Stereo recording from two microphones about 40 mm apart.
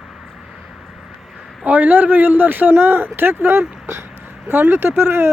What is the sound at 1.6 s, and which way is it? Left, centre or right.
Speech, right.